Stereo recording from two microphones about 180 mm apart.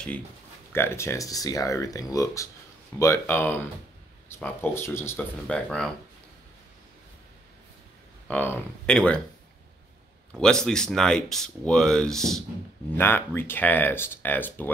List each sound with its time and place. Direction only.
0.7 s speech: 15° left (ahead or behind)
8.3 s speech: 10° left (ahead or behind)
10.3 s speech: 5° left (ahead or behind)